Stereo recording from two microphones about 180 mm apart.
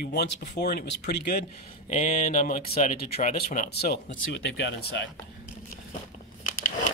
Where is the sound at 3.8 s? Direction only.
60° left (ahead or behind).